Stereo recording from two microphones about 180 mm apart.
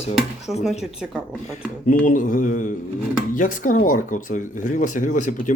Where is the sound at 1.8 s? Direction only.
45° left (ahead or behind).